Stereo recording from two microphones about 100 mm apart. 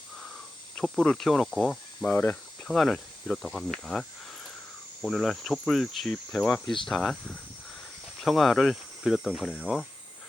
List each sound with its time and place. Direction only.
0.8 s cricket: 10° left (ahead or behind)
2.0 s speech: 20° left (ahead or behind)
2.6 s cricket: 5° left (ahead or behind)
5.0 s cricket: centre (ahead or behind)
6.3 s speech: 10° left (ahead or behind)
6.8 s cricket: 5° left (ahead or behind)